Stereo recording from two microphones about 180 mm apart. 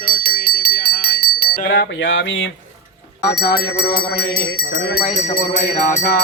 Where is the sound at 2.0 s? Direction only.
85° left.